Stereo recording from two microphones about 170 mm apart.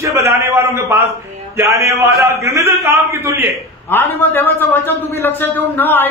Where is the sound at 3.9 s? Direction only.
10° left (ahead or behind).